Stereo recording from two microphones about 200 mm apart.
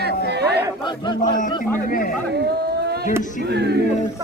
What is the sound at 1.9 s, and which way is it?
Speech, 45° left (ahead or behind).